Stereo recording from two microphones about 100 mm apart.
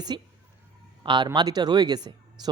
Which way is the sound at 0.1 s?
50° right (ahead or behind).